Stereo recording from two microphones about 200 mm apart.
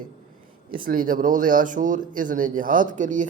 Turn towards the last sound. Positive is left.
turn(degrees=-40)  # may be behind; listen again after turning